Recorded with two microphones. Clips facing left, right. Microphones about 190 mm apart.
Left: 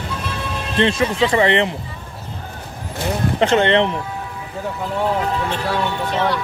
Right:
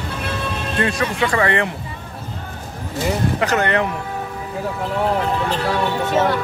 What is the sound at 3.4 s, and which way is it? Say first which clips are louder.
Speech: left 6 dB; 25° left (ahead or behind).